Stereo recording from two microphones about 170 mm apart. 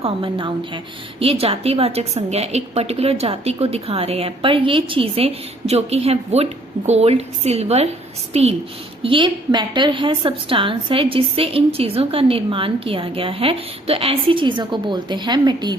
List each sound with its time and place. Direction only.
0.0 s a woman's voice: 30° right (ahead or behind)